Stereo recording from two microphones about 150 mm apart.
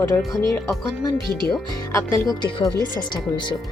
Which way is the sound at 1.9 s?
20° left (ahead or behind).